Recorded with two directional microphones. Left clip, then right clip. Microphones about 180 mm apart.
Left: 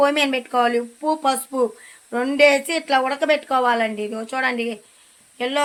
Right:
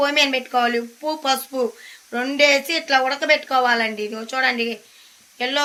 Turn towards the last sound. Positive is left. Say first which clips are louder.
# even
turn(degrees=60)  # may be behind; listen again after turning